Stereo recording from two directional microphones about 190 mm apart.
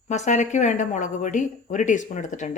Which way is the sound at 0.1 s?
35° left (ahead or behind).